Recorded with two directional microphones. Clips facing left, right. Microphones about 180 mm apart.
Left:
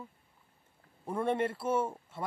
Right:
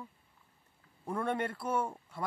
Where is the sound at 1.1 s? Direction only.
25° left (ahead or behind).